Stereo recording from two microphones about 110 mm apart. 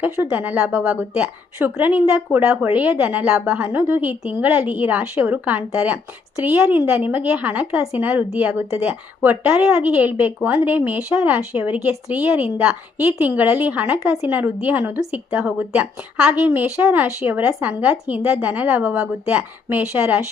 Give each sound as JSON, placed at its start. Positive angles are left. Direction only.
{"t": 0.0, "sound": "a woman's voice", "side_deg": -15}